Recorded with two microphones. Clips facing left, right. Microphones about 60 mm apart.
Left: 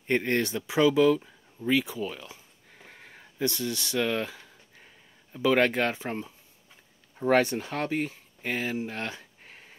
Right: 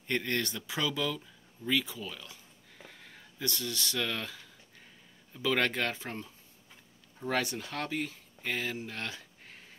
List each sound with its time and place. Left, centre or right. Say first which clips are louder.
0.0 s speech: left 6 dB; left
7.2 s speech: left 9 dB; left